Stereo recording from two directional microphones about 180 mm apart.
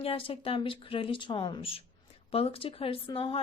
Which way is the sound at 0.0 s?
30° left (ahead or behind).